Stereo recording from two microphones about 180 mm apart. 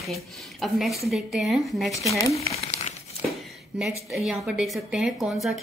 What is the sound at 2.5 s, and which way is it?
Crumpling, 35° left (ahead or behind).